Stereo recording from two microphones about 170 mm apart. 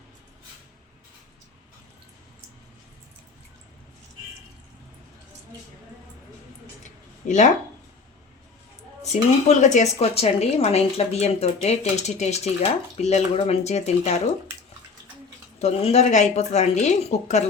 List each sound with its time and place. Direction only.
6.8 s a sound: 45° left (ahead or behind)
9.0 s a woman's voice: 45° left (ahead or behind)
15.5 s a woman's voice: 40° left (ahead or behind)